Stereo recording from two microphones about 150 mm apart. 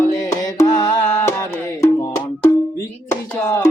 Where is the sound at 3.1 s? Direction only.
20° left (ahead or behind).